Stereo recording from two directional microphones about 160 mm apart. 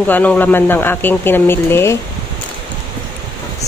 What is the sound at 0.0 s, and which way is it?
Speech, 10° left (ahead or behind).